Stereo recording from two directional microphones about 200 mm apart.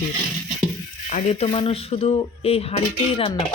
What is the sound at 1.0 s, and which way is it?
Speech, 35° left (ahead or behind).